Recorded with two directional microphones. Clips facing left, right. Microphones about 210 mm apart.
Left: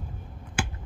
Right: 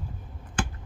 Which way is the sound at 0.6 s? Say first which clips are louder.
Right 1 dB; 10° left (ahead or behind).